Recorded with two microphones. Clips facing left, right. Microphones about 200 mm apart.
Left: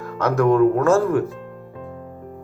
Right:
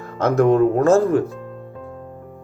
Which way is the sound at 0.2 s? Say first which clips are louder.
Right 1 dB; 25° right (ahead or behind).